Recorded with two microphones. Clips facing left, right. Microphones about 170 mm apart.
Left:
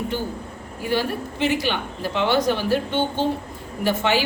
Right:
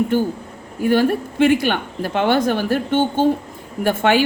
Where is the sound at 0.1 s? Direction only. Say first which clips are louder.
Right 8 dB; 50° right (ahead or behind).